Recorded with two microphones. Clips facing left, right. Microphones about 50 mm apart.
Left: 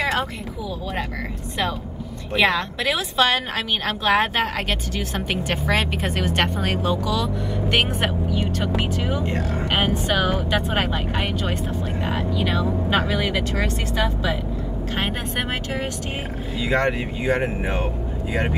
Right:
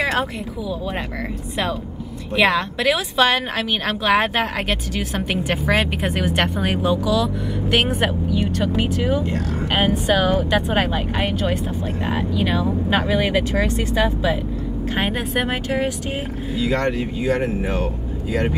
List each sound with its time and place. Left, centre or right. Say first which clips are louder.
0.0 s a sound: right 2 dB; centre
2.3 s a woman's voice: right 2 dB; centre
16.6 s speech: even; left